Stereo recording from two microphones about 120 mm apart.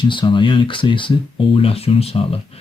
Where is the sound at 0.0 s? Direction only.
40° left (ahead or behind).